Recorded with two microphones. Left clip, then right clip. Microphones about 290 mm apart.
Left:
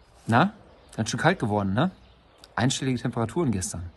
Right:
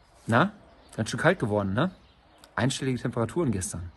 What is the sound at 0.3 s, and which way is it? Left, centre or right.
Speech, centre.